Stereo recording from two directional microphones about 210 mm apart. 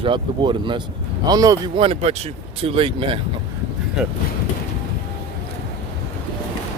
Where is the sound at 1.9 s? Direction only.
30° right (ahead or behind).